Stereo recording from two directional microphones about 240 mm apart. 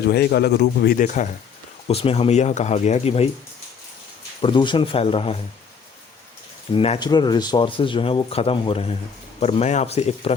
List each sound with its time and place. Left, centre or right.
0.1 s speech: left
4.4 s speech: left
6.7 s speech: left